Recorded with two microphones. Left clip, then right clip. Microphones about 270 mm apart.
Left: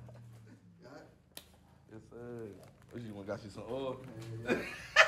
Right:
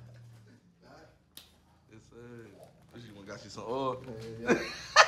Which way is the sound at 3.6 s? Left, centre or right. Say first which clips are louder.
Right 8 dB; centre.